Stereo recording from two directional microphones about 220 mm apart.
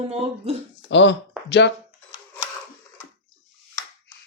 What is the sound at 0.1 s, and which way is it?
Speech, 30° right (ahead or behind).